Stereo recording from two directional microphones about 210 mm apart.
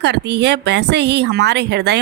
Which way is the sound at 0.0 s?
55° right (ahead or behind).